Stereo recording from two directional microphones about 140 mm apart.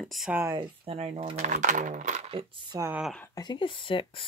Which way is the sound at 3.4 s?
35° left (ahead or behind).